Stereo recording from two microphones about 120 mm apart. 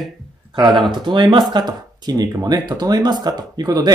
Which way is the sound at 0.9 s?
40° right (ahead or behind).